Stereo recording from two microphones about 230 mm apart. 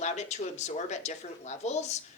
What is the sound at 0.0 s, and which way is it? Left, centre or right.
Speech, left.